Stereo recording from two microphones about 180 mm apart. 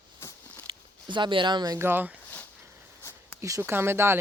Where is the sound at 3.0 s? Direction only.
15° left (ahead or behind).